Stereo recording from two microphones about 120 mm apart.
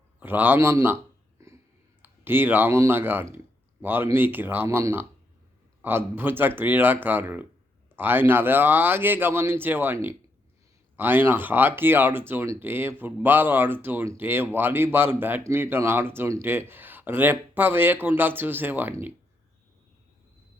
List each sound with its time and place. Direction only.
0.2 s speech: 15° right (ahead or behind)
1.4 s a sound: 25° right (ahead or behind)
2.0 s speech: 20° right (ahead or behind)